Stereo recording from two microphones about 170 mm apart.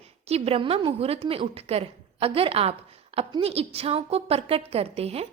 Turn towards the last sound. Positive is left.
turn(degrees=-35)  # may be behind; listen again after turning